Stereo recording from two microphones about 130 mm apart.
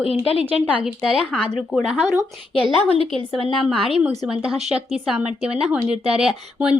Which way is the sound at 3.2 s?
45° right (ahead or behind).